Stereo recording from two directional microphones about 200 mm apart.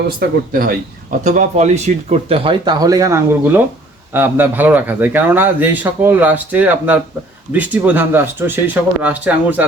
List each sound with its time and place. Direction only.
1.2 s speech: 35° right (ahead or behind); by 9.6 s 10° right (ahead or behind)